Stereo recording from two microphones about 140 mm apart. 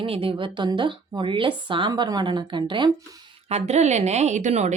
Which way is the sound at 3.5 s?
55° right (ahead or behind).